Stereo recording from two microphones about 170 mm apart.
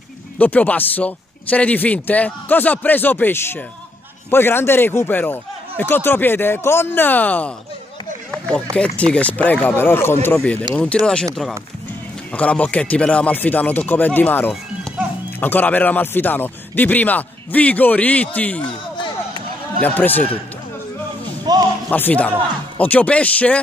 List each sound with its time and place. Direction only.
0.4 s speech: 10° left (ahead or behind)
8.3 s run: 5° left (ahead or behind)
8.7 s speech: 5° left (ahead or behind)
12.3 s speech: 10° left (ahead or behind)
14.5 s music: centre (ahead or behind)
15.4 s speech: 10° left (ahead or behind)
18.9 s a sound: 25° left (ahead or behind)
19.8 s speech: 10° left (ahead or behind)
21.5 s a sound: 25° right (ahead or behind)
21.9 s speech: 10° left (ahead or behind)